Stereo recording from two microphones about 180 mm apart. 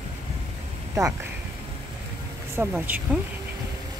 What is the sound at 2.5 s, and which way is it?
Speech, 10° right (ahead or behind).